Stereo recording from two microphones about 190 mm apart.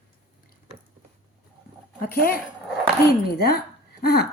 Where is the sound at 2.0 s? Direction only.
50° left (ahead or behind).